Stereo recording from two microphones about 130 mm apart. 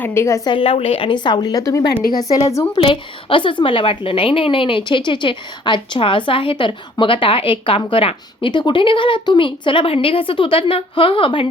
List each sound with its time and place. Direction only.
0.0 s a woman's voice: 20° left (ahead or behind)
0.4 s a woman's voice: 45° left (ahead or behind); by 2.6 s 25° left (ahead or behind)
2.7 s a woman's voice: 40° left (ahead or behind)